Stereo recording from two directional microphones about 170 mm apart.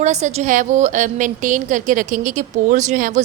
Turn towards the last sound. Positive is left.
turn(degrees=-50)  # may be behind; listen again after turning